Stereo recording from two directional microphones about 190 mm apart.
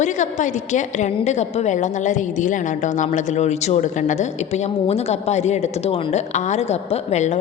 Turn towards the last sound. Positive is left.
turn(degrees=35)  # may be behind; listen again after turning